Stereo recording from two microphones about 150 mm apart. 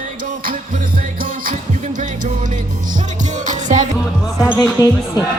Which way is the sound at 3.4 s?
55° right (ahead or behind).